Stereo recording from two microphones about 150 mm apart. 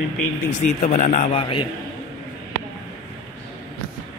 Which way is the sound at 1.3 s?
35° left (ahead or behind).